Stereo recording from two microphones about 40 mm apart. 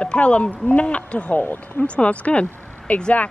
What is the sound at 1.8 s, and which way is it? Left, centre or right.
Speech, left.